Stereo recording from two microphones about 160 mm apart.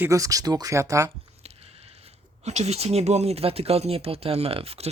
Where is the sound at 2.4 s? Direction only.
45° right (ahead or behind).